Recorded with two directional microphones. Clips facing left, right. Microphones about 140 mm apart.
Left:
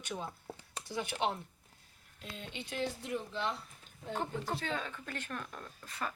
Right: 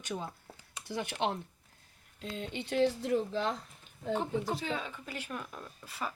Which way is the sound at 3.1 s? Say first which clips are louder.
Right 6 dB; 40° right (ahead or behind).